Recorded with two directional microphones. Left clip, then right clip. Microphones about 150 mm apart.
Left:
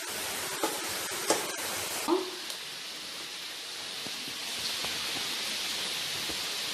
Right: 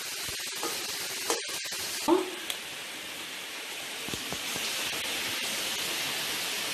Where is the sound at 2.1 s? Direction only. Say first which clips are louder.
Right 4 dB; 10° right (ahead or behind).